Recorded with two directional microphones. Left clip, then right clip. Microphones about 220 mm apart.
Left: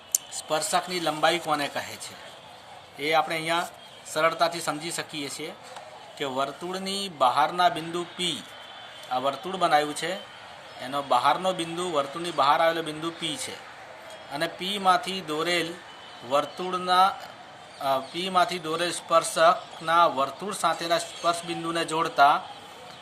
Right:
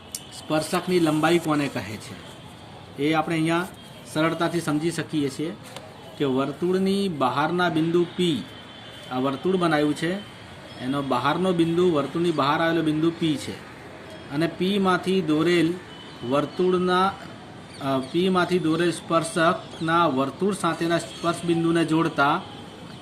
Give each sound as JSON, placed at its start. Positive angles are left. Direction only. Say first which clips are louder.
{"t": 0.4, "sound": "speech", "louder": "right 2 dB", "side_deg": 10}
{"t": 3.0, "sound": "speech", "louder": "right 1 dB", "side_deg": 15}